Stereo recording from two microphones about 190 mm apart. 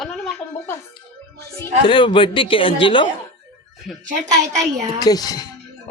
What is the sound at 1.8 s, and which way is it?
A man's voice, 25° left (ahead or behind).